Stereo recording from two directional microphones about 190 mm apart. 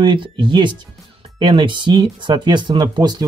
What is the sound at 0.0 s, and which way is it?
Speech, 25° right (ahead or behind).